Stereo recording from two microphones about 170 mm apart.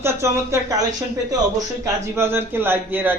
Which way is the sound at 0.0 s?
15° right (ahead or behind).